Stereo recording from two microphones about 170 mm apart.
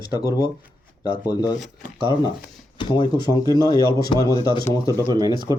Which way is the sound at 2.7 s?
25° left (ahead or behind).